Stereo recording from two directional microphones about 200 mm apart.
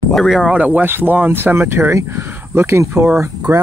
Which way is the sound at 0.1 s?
Centre (ahead or behind).